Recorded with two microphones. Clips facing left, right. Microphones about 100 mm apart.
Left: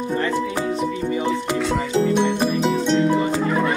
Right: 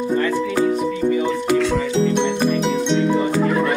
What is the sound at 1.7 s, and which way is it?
Music, 5° left (ahead or behind).